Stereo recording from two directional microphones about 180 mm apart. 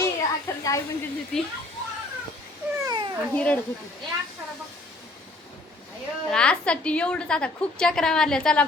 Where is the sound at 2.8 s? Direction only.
25° right (ahead or behind).